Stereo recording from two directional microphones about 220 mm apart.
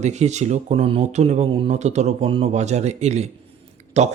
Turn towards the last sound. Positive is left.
turn(degrees=-30)  # may be behind; listen again after turning